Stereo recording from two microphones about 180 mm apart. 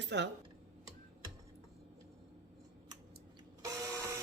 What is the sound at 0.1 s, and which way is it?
Speech, 75° right (ahead or behind).